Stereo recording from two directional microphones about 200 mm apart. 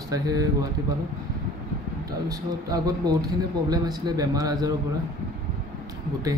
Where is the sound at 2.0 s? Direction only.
20° right (ahead or behind).